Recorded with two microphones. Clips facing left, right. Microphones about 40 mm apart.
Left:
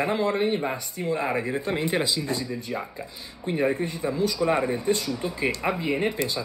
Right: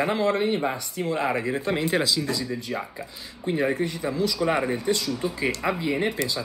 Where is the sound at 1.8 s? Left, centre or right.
Left.